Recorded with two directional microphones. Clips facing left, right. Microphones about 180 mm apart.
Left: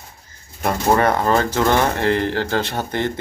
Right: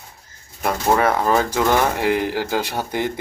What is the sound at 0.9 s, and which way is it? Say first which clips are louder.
Speech: left 1 dB; 5° right (ahead or behind).